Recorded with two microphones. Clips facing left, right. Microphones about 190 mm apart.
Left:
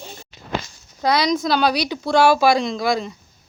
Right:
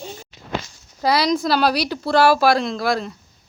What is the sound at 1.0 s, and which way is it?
Speech, 5° right (ahead or behind).